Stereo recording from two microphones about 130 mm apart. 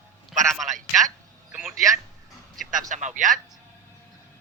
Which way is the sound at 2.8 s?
75° right (ahead or behind).